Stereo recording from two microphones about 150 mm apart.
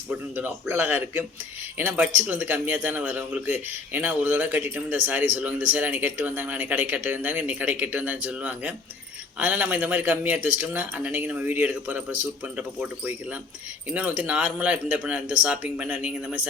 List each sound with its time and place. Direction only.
0.1 s speech: 10° right (ahead or behind)